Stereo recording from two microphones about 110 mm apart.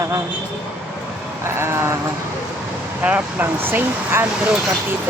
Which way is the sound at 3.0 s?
15° right (ahead or behind).